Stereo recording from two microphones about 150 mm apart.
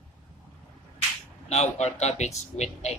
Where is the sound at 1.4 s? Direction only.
45° left (ahead or behind).